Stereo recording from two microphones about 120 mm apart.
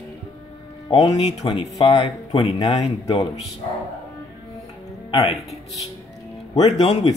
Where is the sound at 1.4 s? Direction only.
50° left (ahead or behind).